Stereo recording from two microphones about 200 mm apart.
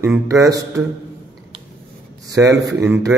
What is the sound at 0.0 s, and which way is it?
Speech, 15° right (ahead or behind).